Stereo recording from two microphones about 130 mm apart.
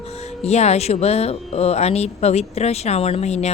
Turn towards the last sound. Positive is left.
turn(degrees=55)  # may be behind; listen again after turning